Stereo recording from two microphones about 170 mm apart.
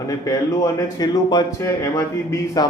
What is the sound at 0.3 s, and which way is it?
Speech, 20° left (ahead or behind).